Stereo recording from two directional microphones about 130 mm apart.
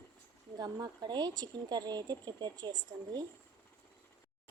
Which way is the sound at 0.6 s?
30° right (ahead or behind).